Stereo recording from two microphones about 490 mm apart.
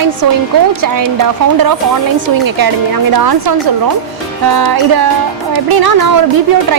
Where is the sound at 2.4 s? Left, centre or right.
Right.